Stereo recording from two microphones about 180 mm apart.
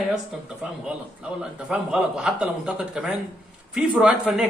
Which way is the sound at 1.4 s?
5° right (ahead or behind).